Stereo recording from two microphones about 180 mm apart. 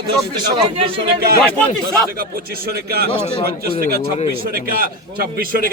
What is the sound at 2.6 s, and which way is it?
Speech, 60° right (ahead or behind).